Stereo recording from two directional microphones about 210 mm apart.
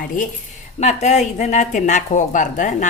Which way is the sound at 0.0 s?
40° left (ahead or behind).